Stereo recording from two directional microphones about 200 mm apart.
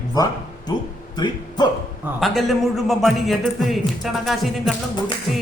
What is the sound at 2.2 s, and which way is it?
Speech, centre (ahead or behind).